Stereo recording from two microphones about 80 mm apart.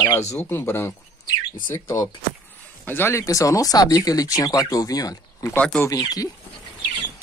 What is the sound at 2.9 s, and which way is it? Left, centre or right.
Speech, left.